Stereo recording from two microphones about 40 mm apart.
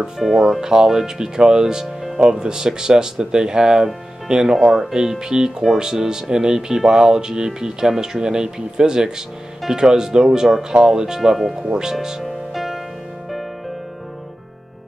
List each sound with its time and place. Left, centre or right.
0.4 s speech: centre
12.2 s music: centre